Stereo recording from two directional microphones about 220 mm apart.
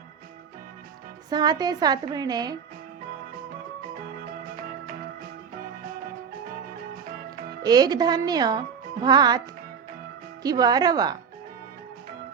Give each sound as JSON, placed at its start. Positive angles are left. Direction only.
{"t": 1.3, "sound": "a woman's voice", "side_deg": -20}
{"t": 7.6, "sound": "a woman's voice", "side_deg": -20}
{"t": 10.4, "sound": "a woman's voice", "side_deg": -15}